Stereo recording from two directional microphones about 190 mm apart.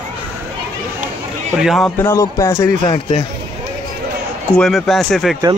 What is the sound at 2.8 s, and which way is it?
Speech, 25° left (ahead or behind).